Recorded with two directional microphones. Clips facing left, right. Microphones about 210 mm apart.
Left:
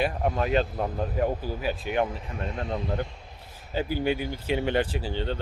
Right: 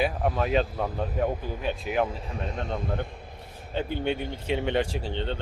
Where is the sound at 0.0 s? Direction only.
Centre (ahead or behind).